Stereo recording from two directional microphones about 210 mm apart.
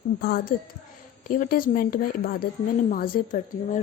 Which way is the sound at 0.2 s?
45° left (ahead or behind).